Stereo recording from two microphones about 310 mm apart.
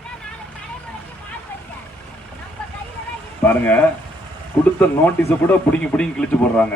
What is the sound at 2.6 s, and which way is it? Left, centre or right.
Vehicle, centre.